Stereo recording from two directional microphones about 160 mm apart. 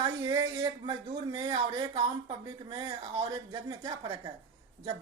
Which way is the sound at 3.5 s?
25° right (ahead or behind).